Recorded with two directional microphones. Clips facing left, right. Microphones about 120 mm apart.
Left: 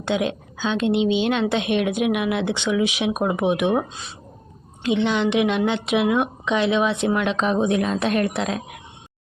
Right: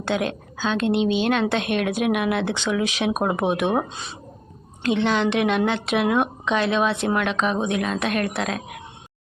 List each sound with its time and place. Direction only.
0.0 s a woman's voice: 15° left (ahead or behind)
4.8 s a woman's voice: 15° left (ahead or behind)